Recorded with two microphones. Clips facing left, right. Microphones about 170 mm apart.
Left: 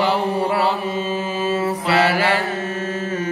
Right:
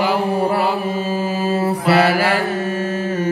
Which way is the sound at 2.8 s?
35° right (ahead or behind).